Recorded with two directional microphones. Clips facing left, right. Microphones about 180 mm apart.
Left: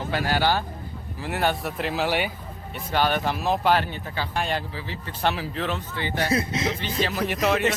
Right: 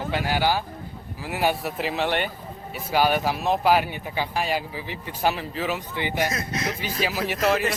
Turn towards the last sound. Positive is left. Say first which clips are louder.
# even
turn(degrees=0)  # may be behind; listen again after turning